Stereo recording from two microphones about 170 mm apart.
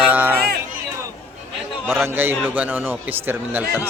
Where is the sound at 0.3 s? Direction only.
65° right (ahead or behind).